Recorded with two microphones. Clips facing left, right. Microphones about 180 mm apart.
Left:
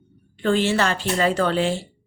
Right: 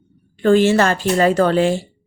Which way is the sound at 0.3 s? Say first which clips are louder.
Right 7 dB; 45° right (ahead or behind).